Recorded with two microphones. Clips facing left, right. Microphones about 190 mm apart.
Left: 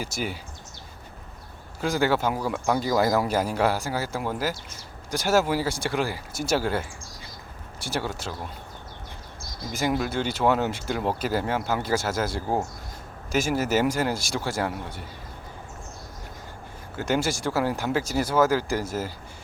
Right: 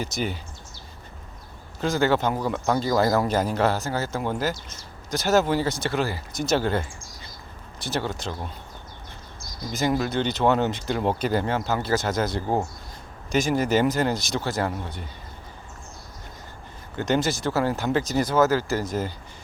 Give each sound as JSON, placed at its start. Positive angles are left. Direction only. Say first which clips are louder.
{"t": 0.0, "sound": "speech", "louder": "right 2 dB", "side_deg": 10}
{"t": 1.8, "sound": "speech", "louder": "right 1 dB", "side_deg": 10}
{"t": 9.7, "sound": "speech", "louder": "right 2 dB", "side_deg": 10}
{"t": 17.0, "sound": "speech", "louder": "right 2 dB", "side_deg": 10}